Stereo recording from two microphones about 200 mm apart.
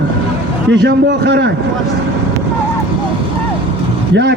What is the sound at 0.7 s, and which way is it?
Speech, 60° right (ahead or behind).